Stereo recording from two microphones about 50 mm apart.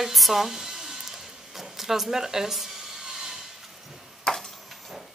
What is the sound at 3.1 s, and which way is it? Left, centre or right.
Wood, centre.